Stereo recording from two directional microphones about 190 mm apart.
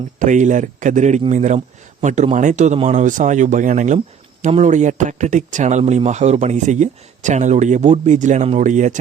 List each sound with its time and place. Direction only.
0.2 s speech: 40° right (ahead or behind)